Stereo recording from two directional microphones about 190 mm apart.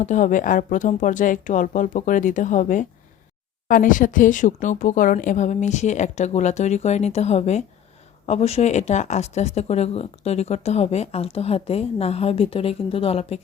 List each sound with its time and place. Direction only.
0.0 s speech: 40° left (ahead or behind)